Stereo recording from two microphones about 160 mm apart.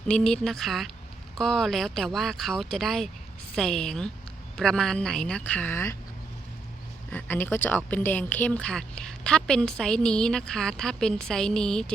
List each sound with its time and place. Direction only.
0.1 s a woman's voice: 5° left (ahead or behind)
7.1 s a woman's voice: 10° left (ahead or behind)